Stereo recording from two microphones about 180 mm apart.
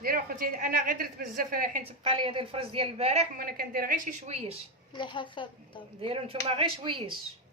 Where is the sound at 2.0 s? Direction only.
30° right (ahead or behind).